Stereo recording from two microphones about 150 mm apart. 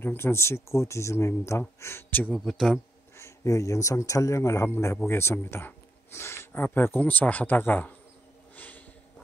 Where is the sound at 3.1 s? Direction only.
20° left (ahead or behind).